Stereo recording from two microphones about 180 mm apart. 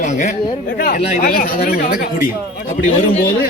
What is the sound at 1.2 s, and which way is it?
Speech, 55° left (ahead or behind).